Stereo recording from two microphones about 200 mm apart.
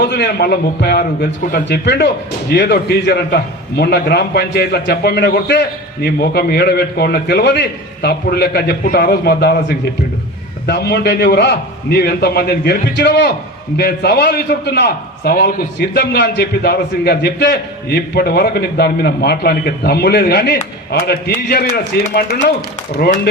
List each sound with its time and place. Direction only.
0.0 s a man's voice: 55° left (ahead or behind)